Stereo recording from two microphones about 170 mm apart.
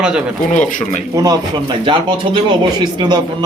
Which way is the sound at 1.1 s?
20° right (ahead or behind).